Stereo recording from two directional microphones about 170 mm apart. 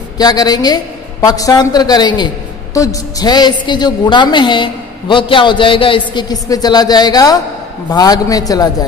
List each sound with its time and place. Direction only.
0.2 s a woman's voice: 25° left (ahead or behind)